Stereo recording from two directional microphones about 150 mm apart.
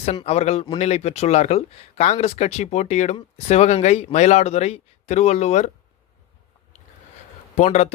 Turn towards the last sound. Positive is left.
turn(degrees=50)  # may be behind; listen again after turning